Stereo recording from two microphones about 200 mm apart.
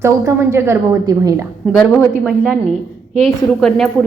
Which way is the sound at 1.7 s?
5° left (ahead or behind).